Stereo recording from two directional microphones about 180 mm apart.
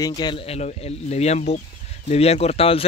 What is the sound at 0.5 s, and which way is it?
Speech, 40° left (ahead or behind).